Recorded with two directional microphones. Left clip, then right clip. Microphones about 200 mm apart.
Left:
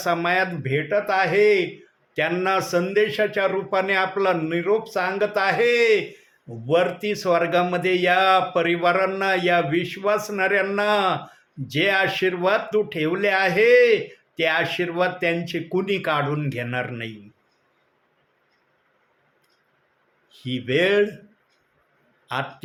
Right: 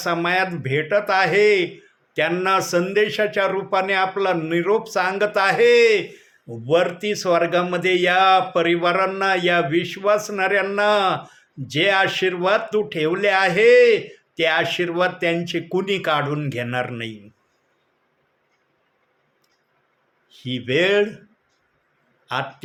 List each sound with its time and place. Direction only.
0.0 s speech: 10° right (ahead or behind)
20.3 s speech: 10° right (ahead or behind)
22.3 s speech: 10° right (ahead or behind)